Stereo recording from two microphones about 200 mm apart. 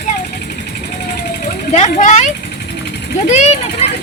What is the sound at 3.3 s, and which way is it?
Speech, 35° left (ahead or behind).